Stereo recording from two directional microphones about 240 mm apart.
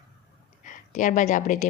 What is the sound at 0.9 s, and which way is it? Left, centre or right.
Speech, left.